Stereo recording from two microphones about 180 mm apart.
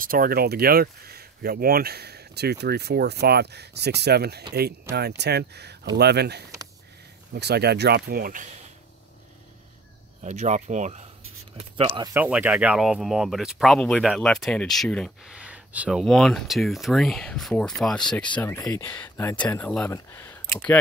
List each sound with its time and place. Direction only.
0.0 s speech: 50° right (ahead or behind)
10.2 s speech: 40° right (ahead or behind)
12.1 s speech: 10° right (ahead or behind); by 20.3 s 15° left (ahead or behind)